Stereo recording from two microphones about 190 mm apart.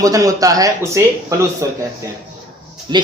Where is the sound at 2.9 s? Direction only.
20° right (ahead or behind).